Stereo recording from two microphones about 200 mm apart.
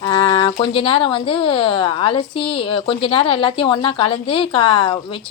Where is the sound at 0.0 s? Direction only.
25° left (ahead or behind).